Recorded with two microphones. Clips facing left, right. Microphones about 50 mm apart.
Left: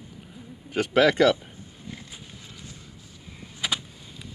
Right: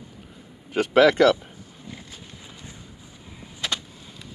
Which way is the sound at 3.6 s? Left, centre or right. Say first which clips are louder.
Even; centre.